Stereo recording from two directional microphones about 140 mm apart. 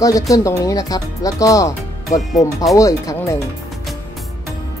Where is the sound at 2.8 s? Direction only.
25° left (ahead or behind).